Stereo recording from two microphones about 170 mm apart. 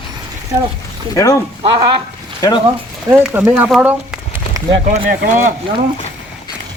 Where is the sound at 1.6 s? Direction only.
30° right (ahead or behind).